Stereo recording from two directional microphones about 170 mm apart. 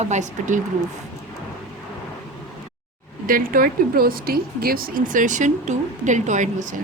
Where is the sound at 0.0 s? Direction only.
45° right (ahead or behind).